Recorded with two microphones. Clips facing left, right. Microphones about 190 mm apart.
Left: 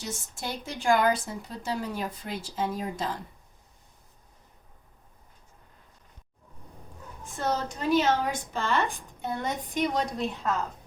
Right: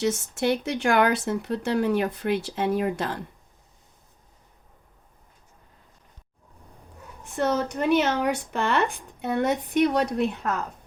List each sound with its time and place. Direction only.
0.0 s a woman's voice: 70° right (ahead or behind)
7.3 s a woman's voice: 65° right (ahead or behind)